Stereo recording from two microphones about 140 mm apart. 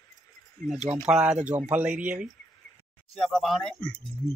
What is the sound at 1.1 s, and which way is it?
Speech, 5° right (ahead or behind).